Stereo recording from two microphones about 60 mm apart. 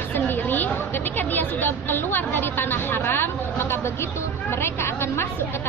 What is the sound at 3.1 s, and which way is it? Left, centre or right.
A woman's voice, left.